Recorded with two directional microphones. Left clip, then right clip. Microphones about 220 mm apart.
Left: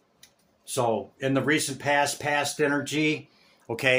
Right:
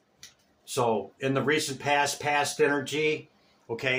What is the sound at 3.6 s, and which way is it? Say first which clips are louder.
Speech: left 5 dB; 50° left (ahead or behind).